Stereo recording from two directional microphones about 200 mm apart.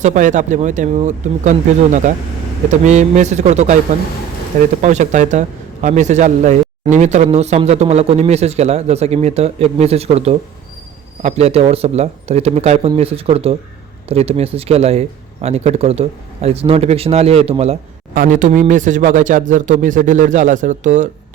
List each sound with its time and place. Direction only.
0.0 s a man's voice: 40° right (ahead or behind)
4.8 s a man's voice: 35° right (ahead or behind)
18.1 s a man's voice: 45° right (ahead or behind)